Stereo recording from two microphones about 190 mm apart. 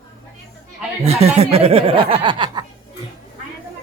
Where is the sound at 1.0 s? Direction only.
35° right (ahead or behind).